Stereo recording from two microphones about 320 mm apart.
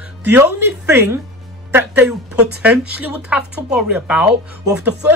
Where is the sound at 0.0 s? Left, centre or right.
Centre.